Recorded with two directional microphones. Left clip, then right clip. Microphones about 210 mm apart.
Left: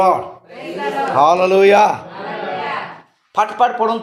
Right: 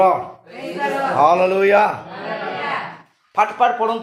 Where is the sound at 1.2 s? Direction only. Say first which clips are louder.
Left 3 dB; 35° left (ahead or behind).